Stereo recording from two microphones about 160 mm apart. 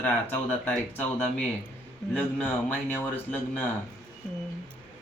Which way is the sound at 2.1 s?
10° left (ahead or behind).